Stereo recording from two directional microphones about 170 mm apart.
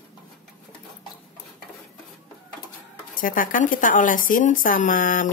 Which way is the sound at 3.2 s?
55° left (ahead or behind).